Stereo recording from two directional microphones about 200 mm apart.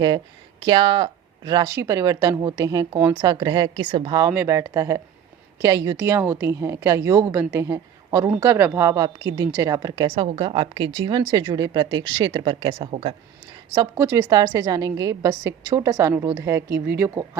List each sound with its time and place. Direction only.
0.6 s a woman's voice: 25° right (ahead or behind)
13.7 s a woman's voice: 15° right (ahead or behind)
16.6 s speech: 50° right (ahead or behind)